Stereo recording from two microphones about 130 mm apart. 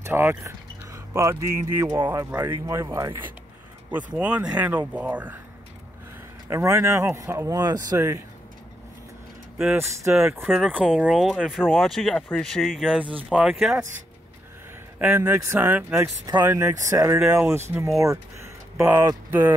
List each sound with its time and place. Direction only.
0.0 s speech: 15° right (ahead or behind)
6.5 s speech: 25° right (ahead or behind)
9.8 s speech: 20° right (ahead or behind)
11.0 s speech: 5° right (ahead or behind)
12.6 s speech: 5° right (ahead or behind)
15.0 s speech: 15° right (ahead or behind)
16.0 s speech: 30° right (ahead or behind)